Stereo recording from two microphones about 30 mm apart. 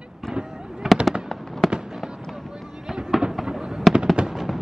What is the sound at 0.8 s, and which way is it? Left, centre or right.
Fireworks, centre.